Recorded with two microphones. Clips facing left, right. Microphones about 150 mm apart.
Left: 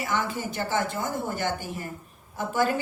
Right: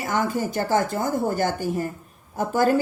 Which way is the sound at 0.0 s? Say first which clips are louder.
Right 5 dB; 40° right (ahead or behind).